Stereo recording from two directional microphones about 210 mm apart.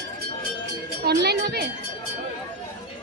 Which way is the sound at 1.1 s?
50° right (ahead or behind).